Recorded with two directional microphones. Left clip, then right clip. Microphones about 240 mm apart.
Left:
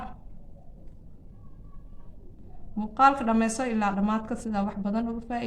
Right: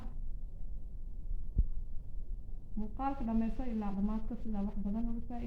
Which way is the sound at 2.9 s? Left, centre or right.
Left.